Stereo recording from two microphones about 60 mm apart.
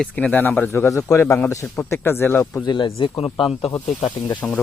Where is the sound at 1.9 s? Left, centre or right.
Left.